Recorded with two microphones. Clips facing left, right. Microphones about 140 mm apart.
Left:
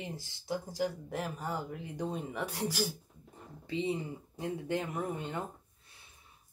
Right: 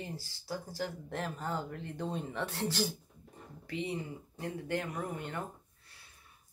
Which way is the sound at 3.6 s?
25° left (ahead or behind).